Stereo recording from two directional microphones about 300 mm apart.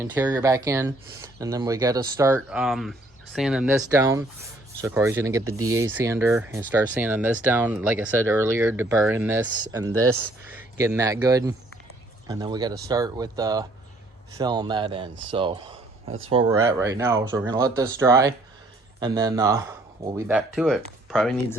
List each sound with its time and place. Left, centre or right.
0.0 s speech: centre
5.5 s speech: right
5.8 s speech: centre
9.9 s speech: right
10.6 s speech: centre